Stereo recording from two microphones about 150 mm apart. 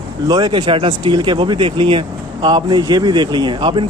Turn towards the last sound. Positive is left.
turn(degrees=-35)  # may be behind; listen again after turning